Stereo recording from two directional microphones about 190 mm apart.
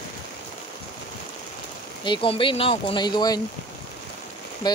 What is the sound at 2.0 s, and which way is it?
Speech, 25° left (ahead or behind).